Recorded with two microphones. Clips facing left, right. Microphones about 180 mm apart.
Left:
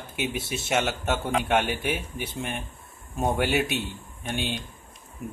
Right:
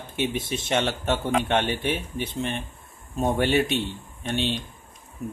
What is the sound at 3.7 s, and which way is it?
Speech, 25° right (ahead or behind).